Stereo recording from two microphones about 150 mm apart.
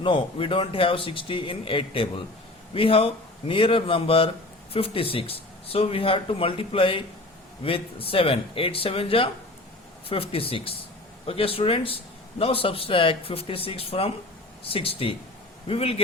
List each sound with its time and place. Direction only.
0.0 s speech: 35° left (ahead or behind)